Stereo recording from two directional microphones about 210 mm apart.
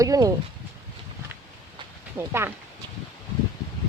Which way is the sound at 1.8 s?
25° right (ahead or behind).